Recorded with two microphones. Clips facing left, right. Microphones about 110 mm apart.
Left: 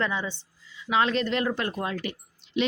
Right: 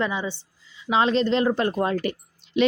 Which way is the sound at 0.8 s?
25° right (ahead or behind).